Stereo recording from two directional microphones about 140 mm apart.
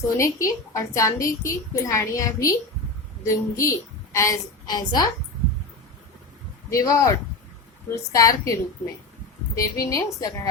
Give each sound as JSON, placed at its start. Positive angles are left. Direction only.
{"t": 0.2, "sound": "a woman's voice", "side_deg": 20}
{"t": 6.7, "sound": "a woman's voice", "side_deg": 25}
{"t": 9.6, "sound": "a woman's voice", "side_deg": 25}